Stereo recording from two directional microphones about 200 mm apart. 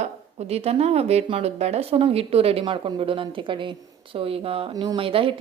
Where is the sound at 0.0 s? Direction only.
30° right (ahead or behind).